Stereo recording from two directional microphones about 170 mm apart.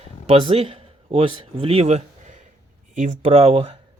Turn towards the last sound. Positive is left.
turn(degrees=-35)  # may be behind; listen again after turning